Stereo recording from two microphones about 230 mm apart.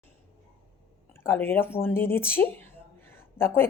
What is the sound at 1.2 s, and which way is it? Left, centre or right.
A woman's voice, centre.